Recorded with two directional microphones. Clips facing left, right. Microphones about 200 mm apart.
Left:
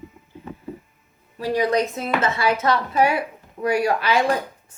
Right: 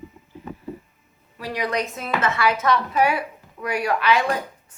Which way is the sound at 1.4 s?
25° left (ahead or behind).